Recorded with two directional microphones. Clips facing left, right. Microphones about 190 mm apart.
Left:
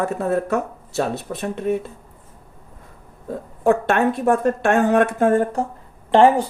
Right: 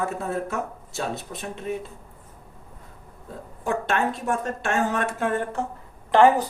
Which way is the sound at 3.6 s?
60° left (ahead or behind).